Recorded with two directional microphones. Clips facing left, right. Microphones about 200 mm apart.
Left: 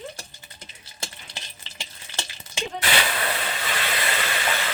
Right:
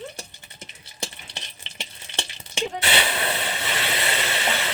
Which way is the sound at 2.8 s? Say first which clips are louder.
Left 1 dB; 25° right (ahead or behind).